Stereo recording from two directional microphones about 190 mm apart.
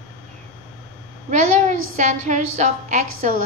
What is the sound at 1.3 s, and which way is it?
A woman's voice, 40° right (ahead or behind).